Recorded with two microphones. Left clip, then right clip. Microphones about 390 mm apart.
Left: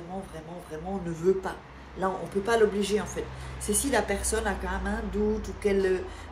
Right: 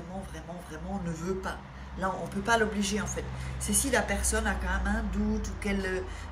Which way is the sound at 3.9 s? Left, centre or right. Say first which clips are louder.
Left 1 dB; centre.